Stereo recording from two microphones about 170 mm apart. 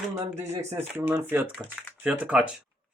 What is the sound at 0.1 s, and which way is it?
Speech, 15° right (ahead or behind).